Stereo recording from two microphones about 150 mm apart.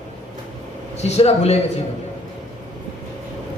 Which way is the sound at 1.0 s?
45° left (ahead or behind).